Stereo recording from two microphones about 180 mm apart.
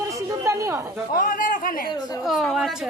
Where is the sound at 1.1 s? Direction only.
50° left (ahead or behind).